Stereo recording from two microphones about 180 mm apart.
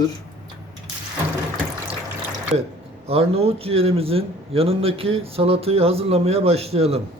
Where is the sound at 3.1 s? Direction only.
35° right (ahead or behind).